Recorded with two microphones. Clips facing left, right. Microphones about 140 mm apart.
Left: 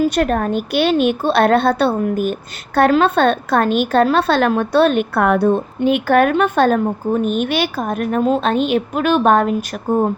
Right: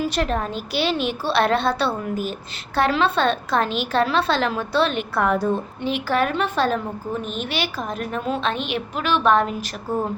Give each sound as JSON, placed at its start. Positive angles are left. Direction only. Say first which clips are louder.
{"t": 0.0, "sound": "a woman's voice", "louder": "left 7 dB", "side_deg": 50}